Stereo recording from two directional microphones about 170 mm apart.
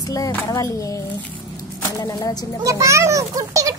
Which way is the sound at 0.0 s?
20° left (ahead or behind).